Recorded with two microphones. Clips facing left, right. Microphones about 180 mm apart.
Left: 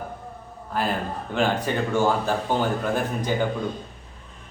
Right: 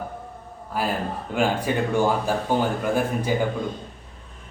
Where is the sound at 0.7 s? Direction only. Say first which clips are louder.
Even; 10° right (ahead or behind).